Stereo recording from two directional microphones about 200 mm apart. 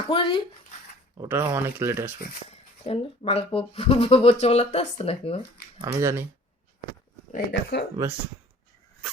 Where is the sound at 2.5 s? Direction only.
30° left (ahead or behind).